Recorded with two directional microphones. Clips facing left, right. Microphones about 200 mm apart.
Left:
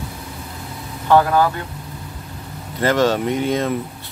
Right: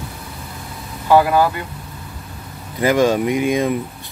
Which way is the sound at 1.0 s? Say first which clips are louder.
Right 1 dB; 10° right (ahead or behind).